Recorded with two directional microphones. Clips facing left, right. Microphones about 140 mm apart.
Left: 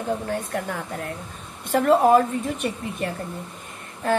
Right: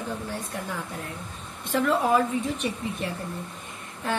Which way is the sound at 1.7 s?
45° left (ahead or behind).